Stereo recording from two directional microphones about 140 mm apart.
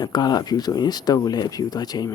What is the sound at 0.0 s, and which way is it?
Speech, 30° left (ahead or behind).